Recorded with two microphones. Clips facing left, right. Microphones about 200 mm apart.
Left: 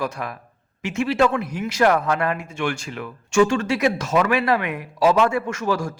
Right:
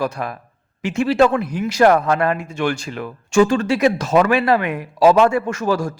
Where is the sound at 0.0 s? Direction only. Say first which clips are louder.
Right 4 dB; 35° right (ahead or behind).